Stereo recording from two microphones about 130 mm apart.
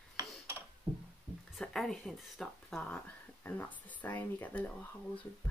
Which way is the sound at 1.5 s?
Centre (ahead or behind).